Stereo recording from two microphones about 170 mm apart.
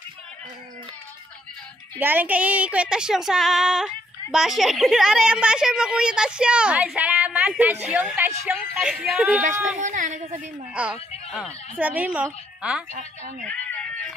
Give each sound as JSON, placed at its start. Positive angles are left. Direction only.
{"t": 2.0, "sound": "child singing", "side_deg": -10}
{"t": 8.5, "sound": "speech", "side_deg": -10}
{"t": 8.8, "sound": "child singing", "side_deg": -5}
{"t": 9.8, "sound": "speech", "side_deg": -45}
{"t": 10.4, "sound": "speech", "side_deg": -5}
{"t": 12.9, "sound": "speech", "side_deg": -45}
{"t": 13.5, "sound": "a sound", "side_deg": 10}